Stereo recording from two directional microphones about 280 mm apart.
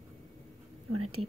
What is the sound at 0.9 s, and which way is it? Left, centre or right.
Speech, right.